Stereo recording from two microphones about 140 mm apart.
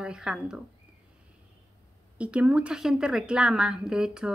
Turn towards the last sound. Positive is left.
turn(degrees=-5)  # may be behind; listen again after turning